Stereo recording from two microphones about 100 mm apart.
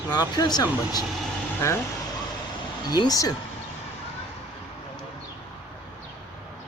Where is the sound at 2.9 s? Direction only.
40° left (ahead or behind).